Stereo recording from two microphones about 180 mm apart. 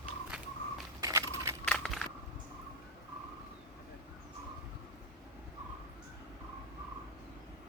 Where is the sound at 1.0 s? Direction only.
15° right (ahead or behind).